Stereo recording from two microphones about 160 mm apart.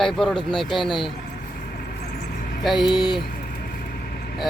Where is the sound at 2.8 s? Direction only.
30° left (ahead or behind).